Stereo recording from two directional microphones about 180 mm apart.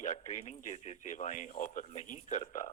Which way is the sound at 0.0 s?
40° left (ahead or behind).